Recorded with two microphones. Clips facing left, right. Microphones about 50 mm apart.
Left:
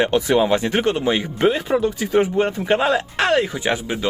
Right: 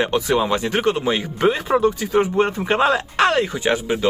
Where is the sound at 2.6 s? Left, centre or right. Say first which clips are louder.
Even; centre.